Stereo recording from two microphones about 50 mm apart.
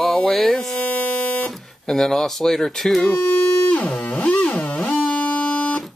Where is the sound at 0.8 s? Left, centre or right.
Left.